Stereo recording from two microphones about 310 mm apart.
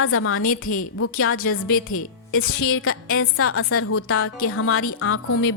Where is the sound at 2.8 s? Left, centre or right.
Left.